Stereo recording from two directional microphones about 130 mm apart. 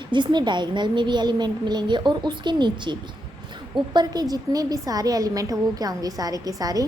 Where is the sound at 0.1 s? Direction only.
35° right (ahead or behind).